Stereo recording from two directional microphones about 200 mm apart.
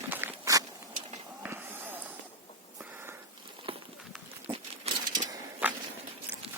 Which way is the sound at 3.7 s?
25° right (ahead or behind).